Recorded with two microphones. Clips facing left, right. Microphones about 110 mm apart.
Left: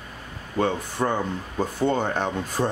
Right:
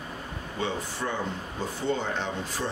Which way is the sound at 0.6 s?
50° left (ahead or behind).